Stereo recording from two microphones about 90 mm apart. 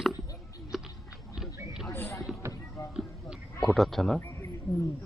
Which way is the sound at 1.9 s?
25° left (ahead or behind).